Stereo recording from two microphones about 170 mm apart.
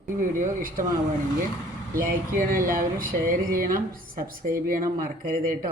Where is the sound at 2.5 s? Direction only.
55° right (ahead or behind).